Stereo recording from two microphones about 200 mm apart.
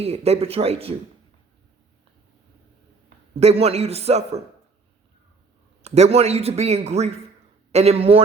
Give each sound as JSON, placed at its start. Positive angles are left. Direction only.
{"t": 0.0, "sound": "a man's voice", "side_deg": -30}
{"t": 3.4, "sound": "a man's voice", "side_deg": -30}
{"t": 5.8, "sound": "a man's voice", "side_deg": -30}